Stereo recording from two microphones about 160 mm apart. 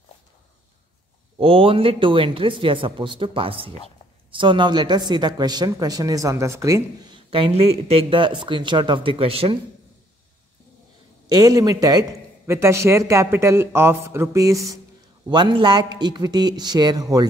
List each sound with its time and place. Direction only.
1.4 s a man's voice: 35° right (ahead or behind); by 6.8 s 20° right (ahead or behind)
7.2 s a man's voice: 35° right (ahead or behind)
11.2 s a man's voice: 25° right (ahead or behind)